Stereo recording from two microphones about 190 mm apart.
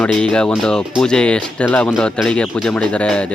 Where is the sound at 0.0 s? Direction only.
5° left (ahead or behind).